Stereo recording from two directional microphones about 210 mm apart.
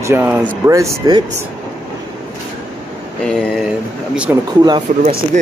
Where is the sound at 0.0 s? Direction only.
10° right (ahead or behind).